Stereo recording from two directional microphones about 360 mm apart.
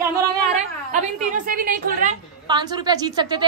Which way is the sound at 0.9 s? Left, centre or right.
Right.